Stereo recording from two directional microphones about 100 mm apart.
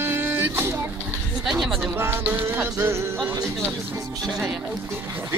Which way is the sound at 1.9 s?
25° right (ahead or behind).